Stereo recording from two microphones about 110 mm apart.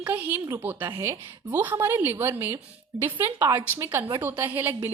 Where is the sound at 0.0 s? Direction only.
15° right (ahead or behind).